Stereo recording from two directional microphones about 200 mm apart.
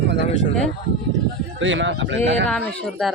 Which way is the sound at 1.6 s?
65° right (ahead or behind).